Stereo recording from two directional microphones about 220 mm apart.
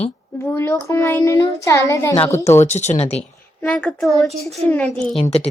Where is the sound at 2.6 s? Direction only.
30° left (ahead or behind).